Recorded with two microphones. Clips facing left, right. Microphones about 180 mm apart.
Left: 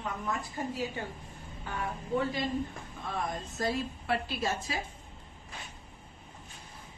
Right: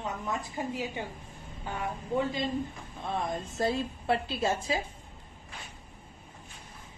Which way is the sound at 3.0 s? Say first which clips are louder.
Right 3 dB; 25° right (ahead or behind).